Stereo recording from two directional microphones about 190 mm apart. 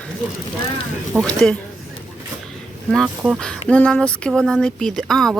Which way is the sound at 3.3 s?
5° left (ahead or behind).